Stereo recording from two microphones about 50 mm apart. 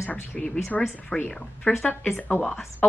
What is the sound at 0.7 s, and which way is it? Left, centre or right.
Speech, left.